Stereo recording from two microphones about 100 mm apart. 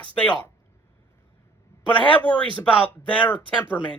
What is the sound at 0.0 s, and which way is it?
Speech, 15° left (ahead or behind).